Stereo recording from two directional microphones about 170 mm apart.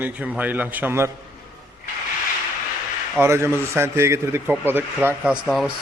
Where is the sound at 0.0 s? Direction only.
10° right (ahead or behind).